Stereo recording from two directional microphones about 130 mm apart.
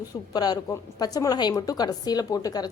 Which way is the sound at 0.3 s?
30° left (ahead or behind).